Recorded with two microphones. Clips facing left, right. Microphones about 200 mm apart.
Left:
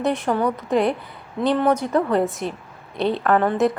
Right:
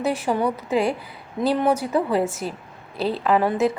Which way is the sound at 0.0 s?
5° right (ahead or behind).